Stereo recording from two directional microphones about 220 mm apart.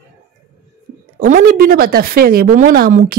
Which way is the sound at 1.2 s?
40° right (ahead or behind).